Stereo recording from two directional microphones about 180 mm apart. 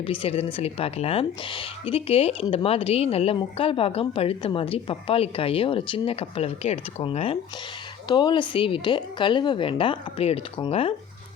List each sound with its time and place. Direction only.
0.0 s a woman's voice: 30° left (ahead or behind)